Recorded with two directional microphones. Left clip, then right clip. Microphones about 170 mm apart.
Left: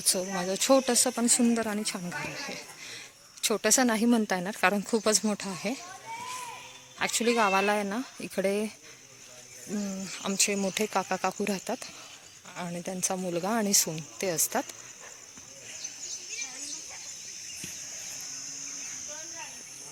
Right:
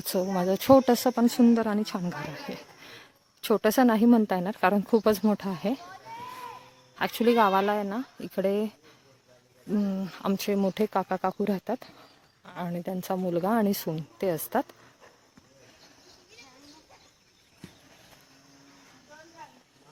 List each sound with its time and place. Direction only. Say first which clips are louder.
0.3 s a woman's voice: right 5 dB; 30° right (ahead or behind)
7.0 s a woman's voice: right 3 dB; 30° right (ahead or behind)
7.6 s speech: even; centre (ahead or behind)
9.8 s a woman's voice: right 3 dB; 25° right (ahead or behind)
10.8 s speech: right 1 dB; 15° right (ahead or behind)